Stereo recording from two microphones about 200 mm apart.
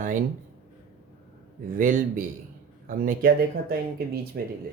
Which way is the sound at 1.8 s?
45° right (ahead or behind).